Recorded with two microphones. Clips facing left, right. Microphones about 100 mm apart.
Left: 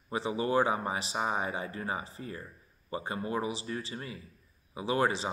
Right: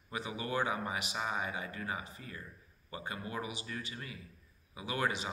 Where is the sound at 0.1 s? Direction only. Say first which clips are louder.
Left 8 dB; 30° left (ahead or behind).